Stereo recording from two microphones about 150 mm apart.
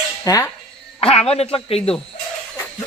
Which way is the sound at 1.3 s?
40° left (ahead or behind).